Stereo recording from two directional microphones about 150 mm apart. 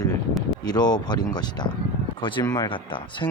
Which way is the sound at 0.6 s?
25° left (ahead or behind).